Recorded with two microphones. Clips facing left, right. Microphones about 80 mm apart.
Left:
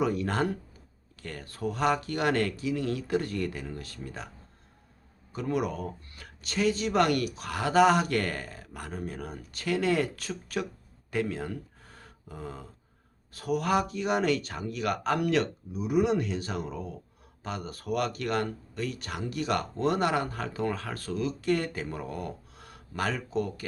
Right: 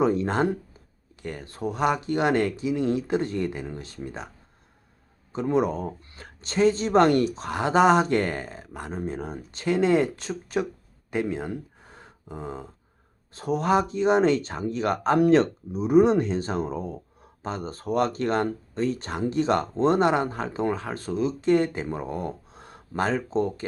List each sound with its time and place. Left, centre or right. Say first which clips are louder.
0.0 s speech: right 5 dB; right
5.3 s speech: right 6 dB; right
11.1 s a sound: right 3 dB; right
13.3 s speech: right 4 dB; right